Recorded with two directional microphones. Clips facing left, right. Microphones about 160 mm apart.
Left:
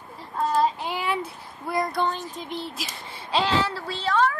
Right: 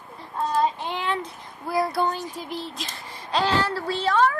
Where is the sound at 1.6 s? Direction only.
5° right (ahead or behind).